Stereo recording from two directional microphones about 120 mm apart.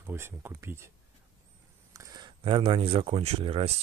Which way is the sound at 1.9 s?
25° right (ahead or behind).